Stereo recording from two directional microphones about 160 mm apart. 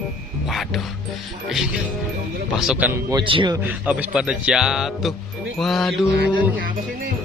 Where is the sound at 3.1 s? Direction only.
30° right (ahead or behind).